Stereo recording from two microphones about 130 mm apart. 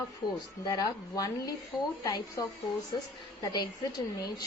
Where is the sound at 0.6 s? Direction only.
30° left (ahead or behind).